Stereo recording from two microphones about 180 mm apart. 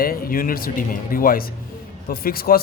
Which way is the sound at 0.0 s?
55° left (ahead or behind).